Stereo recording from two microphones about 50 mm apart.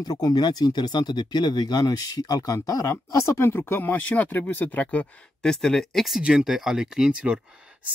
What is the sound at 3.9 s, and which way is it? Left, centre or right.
Speech, left.